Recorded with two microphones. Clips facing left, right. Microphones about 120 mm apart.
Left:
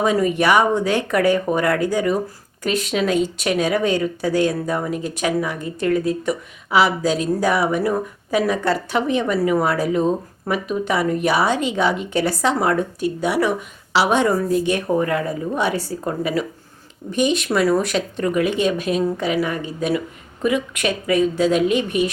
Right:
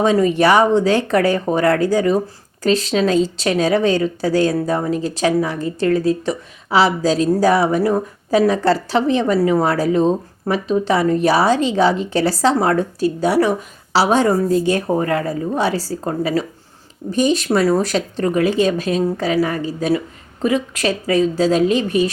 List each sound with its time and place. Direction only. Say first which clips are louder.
0.0 s speech: right 3 dB; 30° right (ahead or behind)